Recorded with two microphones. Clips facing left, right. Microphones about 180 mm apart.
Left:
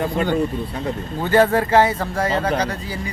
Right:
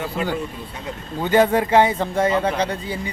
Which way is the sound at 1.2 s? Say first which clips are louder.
Even; 15° right (ahead or behind).